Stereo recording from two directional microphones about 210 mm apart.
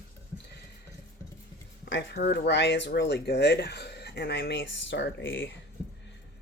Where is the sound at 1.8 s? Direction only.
55° left (ahead or behind).